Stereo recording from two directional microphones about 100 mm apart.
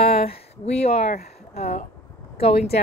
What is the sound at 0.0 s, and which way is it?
Speech, 75° left (ahead or behind).